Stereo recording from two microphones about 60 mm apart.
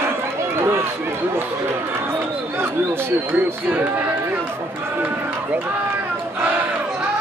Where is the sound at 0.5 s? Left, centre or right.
Right.